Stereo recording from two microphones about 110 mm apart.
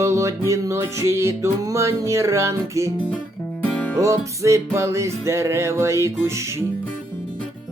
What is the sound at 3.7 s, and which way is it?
Music, 10° left (ahead or behind).